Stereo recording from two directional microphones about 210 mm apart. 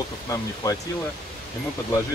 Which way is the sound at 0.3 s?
15° left (ahead or behind).